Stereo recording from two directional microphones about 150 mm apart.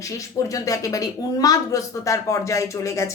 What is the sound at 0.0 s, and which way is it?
A woman's voice, 20° left (ahead or behind).